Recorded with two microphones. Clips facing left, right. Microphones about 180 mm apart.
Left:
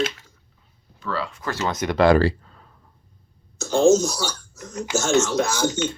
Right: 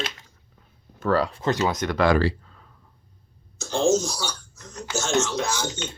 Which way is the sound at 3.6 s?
40° left (ahead or behind).